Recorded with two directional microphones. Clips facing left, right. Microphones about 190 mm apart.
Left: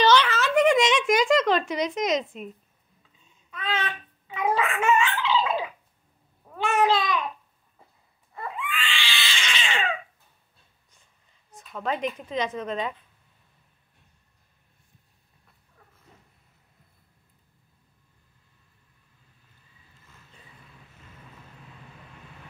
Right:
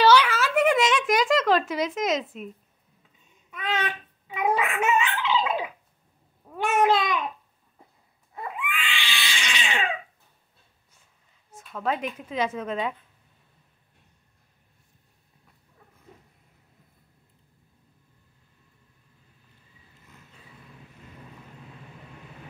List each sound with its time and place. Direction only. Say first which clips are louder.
0.0 s a sound: right 1 dB; 10° right (ahead or behind)
3.4 s speech: right 1 dB; 15° right (ahead or behind)
4.7 s cat: left 1 dB; 15° right (ahead or behind)
6.5 s cat: right 1 dB; 15° right (ahead or behind)
8.4 s cat: even; 20° right (ahead or behind)
11.7 s speech: even; 5° right (ahead or behind)